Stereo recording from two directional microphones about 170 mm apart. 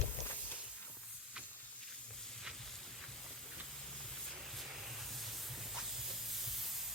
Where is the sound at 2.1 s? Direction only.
Centre (ahead or behind).